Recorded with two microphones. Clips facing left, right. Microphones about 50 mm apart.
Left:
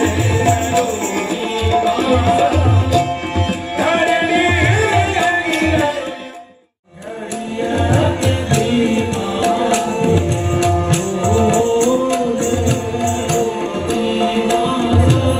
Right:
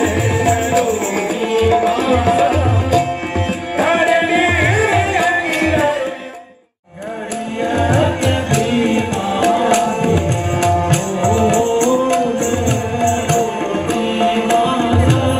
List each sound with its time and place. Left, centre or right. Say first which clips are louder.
0.0 s music: even; right
0.9 s tabla: right 1 dB; right
4.6 s music: right 1 dB; right
5.5 s tabla: right 1 dB; right
7.6 s music: right 1 dB; right